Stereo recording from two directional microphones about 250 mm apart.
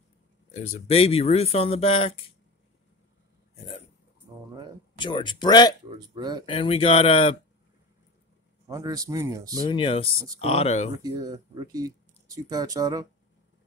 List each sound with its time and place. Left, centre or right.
0.5 s speech: left
4.9 s speech: centre
5.9 s speech: centre
6.4 s speech: centre
8.6 s speech: centre
9.7 s speech: centre
11.0 s speech: centre